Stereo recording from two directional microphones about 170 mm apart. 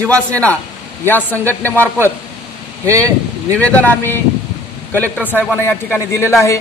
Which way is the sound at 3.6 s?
10° left (ahead or behind).